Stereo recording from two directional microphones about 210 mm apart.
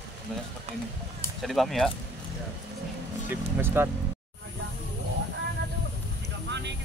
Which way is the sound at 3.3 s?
10° right (ahead or behind).